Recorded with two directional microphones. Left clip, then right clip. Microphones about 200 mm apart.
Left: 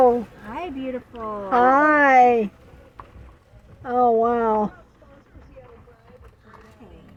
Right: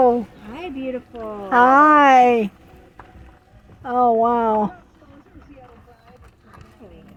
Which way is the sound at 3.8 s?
Centre (ahead or behind).